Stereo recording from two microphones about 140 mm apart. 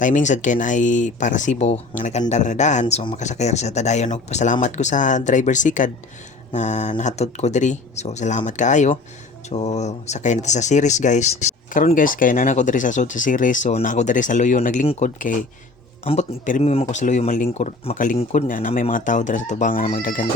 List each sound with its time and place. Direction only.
0.0 s speech: 60° left (ahead or behind)
16.5 s speech: 60° left (ahead or behind)
18.2 s speech: 55° left (ahead or behind)